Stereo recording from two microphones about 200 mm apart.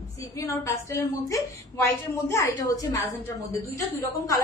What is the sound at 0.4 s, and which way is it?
A woman's voice, 15° left (ahead or behind).